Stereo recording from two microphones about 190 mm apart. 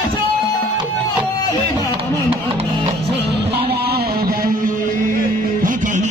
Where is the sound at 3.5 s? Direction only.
55° right (ahead or behind).